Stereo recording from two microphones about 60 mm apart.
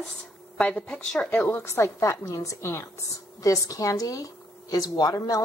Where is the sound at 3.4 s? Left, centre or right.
Left.